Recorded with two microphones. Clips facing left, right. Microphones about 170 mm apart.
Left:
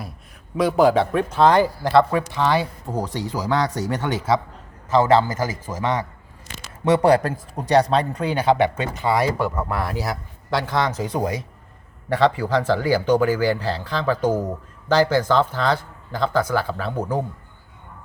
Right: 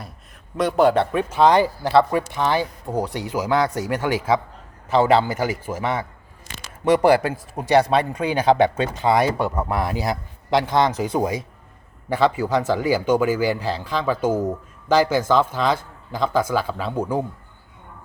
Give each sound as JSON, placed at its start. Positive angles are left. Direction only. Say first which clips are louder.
{"t": 0.5, "sound": "speech", "louder": "left 1 dB", "side_deg": 0}
{"t": 1.4, "sound": "speech", "louder": "even", "side_deg": -10}
{"t": 7.2, "sound": "speech", "louder": "right 1 dB", "side_deg": -10}